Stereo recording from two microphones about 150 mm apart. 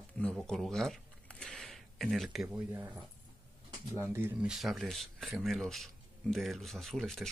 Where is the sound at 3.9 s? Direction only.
15° right (ahead or behind).